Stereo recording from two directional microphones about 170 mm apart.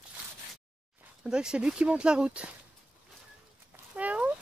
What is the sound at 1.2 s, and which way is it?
Speech, 5° right (ahead or behind).